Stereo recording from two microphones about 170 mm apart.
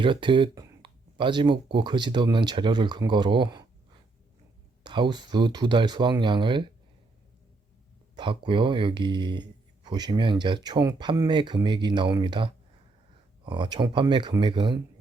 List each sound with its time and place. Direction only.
0.0 s speech: 30° right (ahead or behind)
4.8 s speech: 25° right (ahead or behind)
8.1 s speech: 30° right (ahead or behind)